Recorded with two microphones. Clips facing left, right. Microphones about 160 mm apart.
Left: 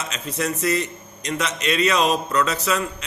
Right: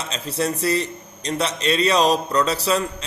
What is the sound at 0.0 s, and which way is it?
A man's voice, 35° right (ahead or behind).